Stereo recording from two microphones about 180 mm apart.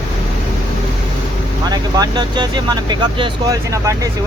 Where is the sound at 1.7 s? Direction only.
25° right (ahead or behind).